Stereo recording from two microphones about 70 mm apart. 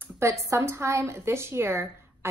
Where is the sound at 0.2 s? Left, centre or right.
Right.